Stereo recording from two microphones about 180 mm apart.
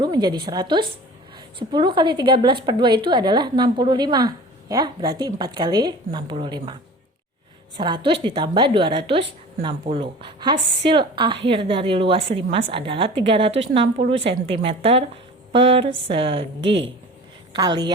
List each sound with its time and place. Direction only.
0.0 s a sound: 25° right (ahead or behind)
0.4 s a woman's voice: 25° right (ahead or behind)
7.8 s a woman's voice: 25° right (ahead or behind)